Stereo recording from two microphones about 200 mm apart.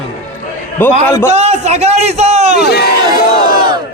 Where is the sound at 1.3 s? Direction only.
35° right (ahead or behind).